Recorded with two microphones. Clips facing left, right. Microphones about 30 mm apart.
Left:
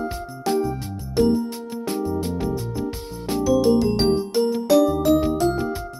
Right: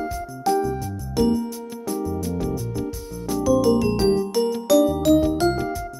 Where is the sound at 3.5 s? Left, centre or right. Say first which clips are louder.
Even; left.